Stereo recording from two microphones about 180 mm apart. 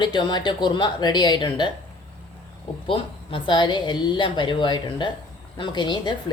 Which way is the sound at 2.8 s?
30° left (ahead or behind).